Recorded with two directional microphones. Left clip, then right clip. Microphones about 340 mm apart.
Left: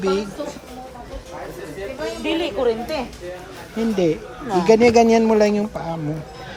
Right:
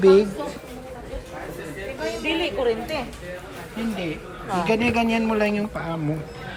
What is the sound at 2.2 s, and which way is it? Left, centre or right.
Speech, left.